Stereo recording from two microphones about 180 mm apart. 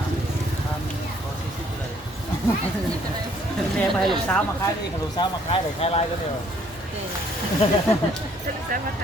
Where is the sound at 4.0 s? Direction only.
Centre (ahead or behind).